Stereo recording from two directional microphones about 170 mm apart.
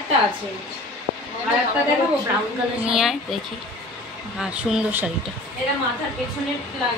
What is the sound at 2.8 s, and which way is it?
Speech, 5° right (ahead or behind).